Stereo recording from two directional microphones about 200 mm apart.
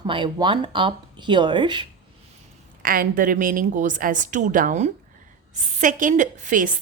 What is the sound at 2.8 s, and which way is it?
A woman's voice, 45° right (ahead or behind).